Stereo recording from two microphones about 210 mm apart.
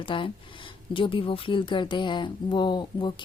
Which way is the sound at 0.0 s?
25° left (ahead or behind).